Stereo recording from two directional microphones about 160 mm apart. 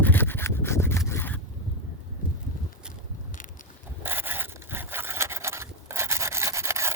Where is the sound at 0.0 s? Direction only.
10° left (ahead or behind).